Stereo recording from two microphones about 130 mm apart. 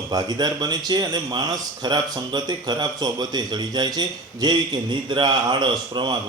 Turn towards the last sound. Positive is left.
turn(degrees=-35)  # may be behind; listen again after turning